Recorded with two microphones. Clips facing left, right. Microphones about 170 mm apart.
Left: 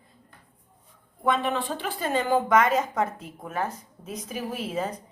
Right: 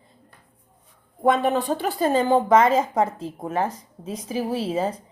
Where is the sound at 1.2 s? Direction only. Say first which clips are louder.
Right 6 dB; 40° right (ahead or behind).